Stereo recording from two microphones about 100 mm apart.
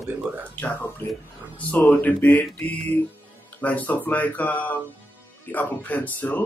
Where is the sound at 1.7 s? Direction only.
20° left (ahead or behind).